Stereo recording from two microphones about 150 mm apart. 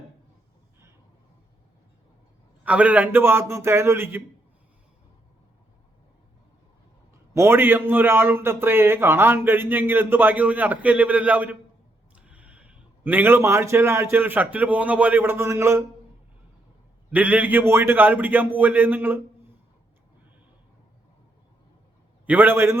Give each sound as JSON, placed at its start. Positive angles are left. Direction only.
{"t": 2.6, "sound": "a man's voice", "side_deg": -10}
{"t": 7.3, "sound": "a man's voice", "side_deg": -15}
{"t": 17.1, "sound": "a man's voice", "side_deg": -10}
{"t": 22.3, "sound": "a man's voice", "side_deg": -10}